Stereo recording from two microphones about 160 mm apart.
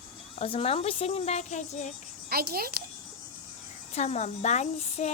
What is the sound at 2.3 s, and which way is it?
Speech, 70° right (ahead or behind).